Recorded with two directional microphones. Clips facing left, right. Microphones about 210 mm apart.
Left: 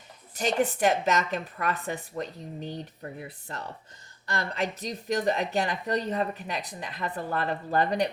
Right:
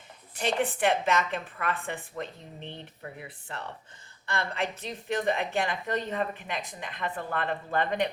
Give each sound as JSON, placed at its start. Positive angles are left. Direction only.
{"t": 0.3, "sound": "a woman's voice", "side_deg": 40}